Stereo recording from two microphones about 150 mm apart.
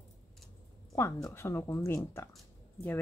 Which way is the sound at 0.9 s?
20° left (ahead or behind).